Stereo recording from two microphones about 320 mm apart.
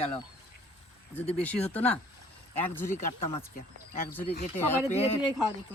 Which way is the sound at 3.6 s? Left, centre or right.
Left.